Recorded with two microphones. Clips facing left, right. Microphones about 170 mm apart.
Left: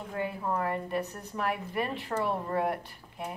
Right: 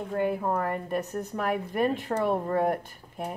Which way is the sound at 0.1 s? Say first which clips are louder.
Right 5 dB; 50° right (ahead or behind).